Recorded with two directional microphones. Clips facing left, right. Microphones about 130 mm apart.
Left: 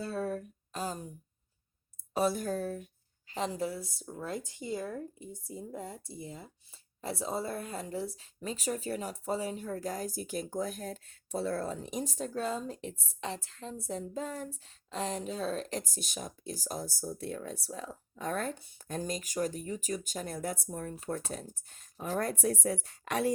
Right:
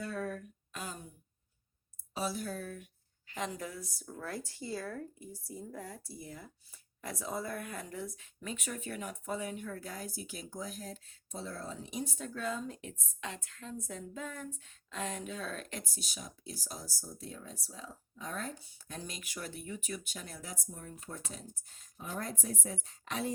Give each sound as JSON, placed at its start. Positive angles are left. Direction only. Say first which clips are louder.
{"t": 0.0, "sound": "a sound", "louder": "left 4 dB", "side_deg": 30}
{"t": 2.1, "sound": "speech", "louder": "left 7 dB", "side_deg": 50}
{"t": 16.0, "sound": "speech", "louder": "left 6 dB", "side_deg": 50}